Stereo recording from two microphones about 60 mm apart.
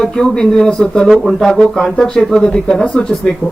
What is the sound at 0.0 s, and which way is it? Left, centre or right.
Speech, centre.